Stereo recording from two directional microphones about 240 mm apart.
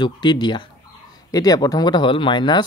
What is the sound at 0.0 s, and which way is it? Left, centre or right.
Speech, centre.